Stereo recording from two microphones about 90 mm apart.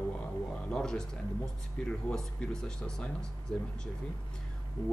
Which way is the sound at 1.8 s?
5° left (ahead or behind).